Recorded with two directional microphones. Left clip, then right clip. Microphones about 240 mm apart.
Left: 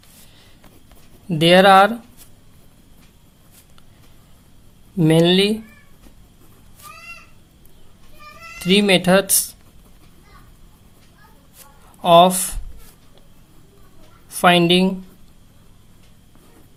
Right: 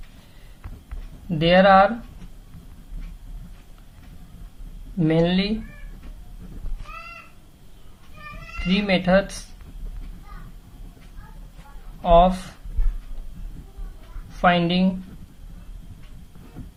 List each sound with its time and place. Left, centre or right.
1.3 s speech: left
4.9 s speech: left
8.6 s speech: left
12.0 s speech: left
14.3 s speech: left